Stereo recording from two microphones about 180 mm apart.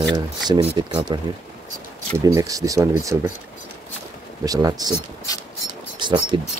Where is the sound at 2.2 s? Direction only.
20° right (ahead or behind).